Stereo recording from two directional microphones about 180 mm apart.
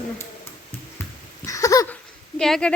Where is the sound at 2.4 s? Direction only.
5° left (ahead or behind).